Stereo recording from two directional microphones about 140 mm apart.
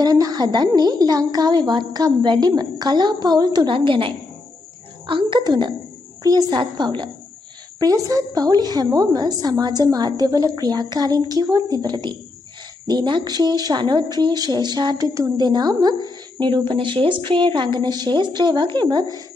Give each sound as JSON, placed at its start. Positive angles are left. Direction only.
{"t": 0.0, "sound": "a woman's voice", "side_deg": -30}